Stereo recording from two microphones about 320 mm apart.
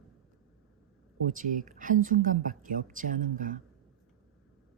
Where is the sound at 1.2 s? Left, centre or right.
Right.